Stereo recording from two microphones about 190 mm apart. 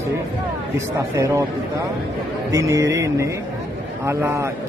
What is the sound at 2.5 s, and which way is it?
A man's voice, 15° right (ahead or behind).